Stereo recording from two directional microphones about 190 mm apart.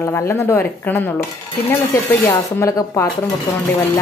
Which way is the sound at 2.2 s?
15° left (ahead or behind).